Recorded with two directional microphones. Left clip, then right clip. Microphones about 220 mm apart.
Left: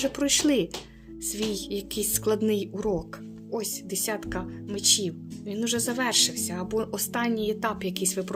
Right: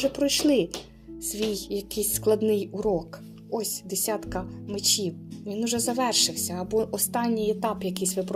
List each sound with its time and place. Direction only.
0.0 s a woman's voice: 20° left (ahead or behind)